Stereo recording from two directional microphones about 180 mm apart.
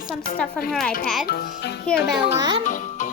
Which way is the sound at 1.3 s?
65° left (ahead or behind).